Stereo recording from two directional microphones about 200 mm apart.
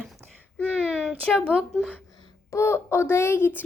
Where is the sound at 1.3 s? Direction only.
5° right (ahead or behind).